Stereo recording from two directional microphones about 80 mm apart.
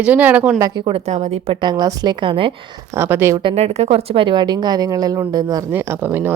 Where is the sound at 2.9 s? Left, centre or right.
Right.